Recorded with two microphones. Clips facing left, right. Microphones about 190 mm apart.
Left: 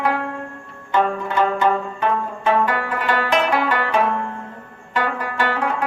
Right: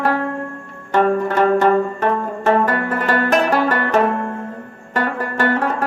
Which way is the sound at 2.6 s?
45° right (ahead or behind).